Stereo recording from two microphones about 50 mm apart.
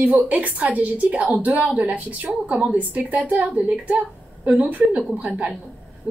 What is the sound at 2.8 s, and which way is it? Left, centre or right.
A woman's voice, right.